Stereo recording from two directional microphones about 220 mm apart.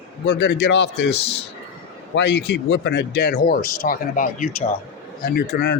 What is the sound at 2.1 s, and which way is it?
Speech, 50° left (ahead or behind).